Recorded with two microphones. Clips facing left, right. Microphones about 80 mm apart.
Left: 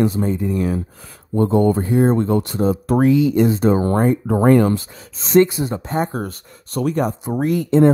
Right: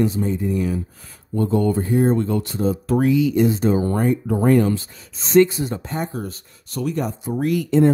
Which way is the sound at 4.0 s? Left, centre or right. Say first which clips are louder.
Left 3 dB; left.